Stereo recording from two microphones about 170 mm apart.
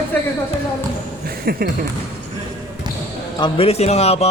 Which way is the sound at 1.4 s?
65° right (ahead or behind).